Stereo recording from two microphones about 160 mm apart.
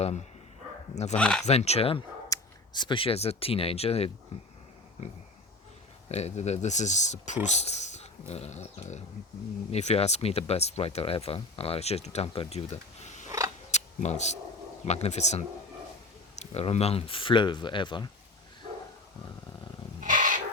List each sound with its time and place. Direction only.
1.1 s speech: 5° left (ahead or behind)
1.5 s speech: 40° left (ahead or behind)
2.3 s speech: 30° left (ahead or behind)
6.1 s speech: 45° left (ahead or behind)
13.7 s camera: 45° left (ahead or behind)
14.8 s speech: 40° left (ahead or behind)
20.0 s a sound: 55° right (ahead or behind)